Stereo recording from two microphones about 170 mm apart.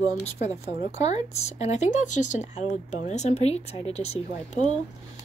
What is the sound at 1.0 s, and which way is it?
Speech, 40° left (ahead or behind).